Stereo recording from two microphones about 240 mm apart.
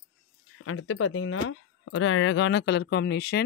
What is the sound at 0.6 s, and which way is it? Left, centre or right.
Speech, left.